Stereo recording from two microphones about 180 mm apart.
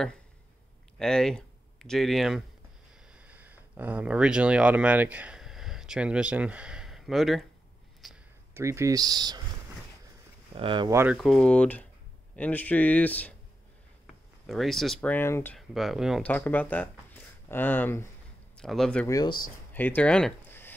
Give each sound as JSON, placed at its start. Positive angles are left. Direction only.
{"t": 0.9, "sound": "speech", "side_deg": 5}
{"t": 8.0, "sound": "a sound", "side_deg": 0}
{"t": 8.5, "sound": "speech", "side_deg": -15}
{"t": 10.5, "sound": "speech", "side_deg": -30}
{"t": 10.9, "sound": "speech", "side_deg": -15}
{"t": 11.1, "sound": "speech", "side_deg": 0}
{"t": 14.4, "sound": "speech", "side_deg": 0}
{"t": 15.5, "sound": "speech", "side_deg": 0}
{"t": 16.3, "sound": "speech", "side_deg": 10}
{"t": 19.0, "sound": "speech", "side_deg": 20}
{"t": 19.7, "sound": "speech", "side_deg": 10}